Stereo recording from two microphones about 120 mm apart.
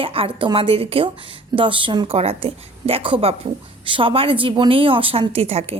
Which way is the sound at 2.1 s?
55° right (ahead or behind).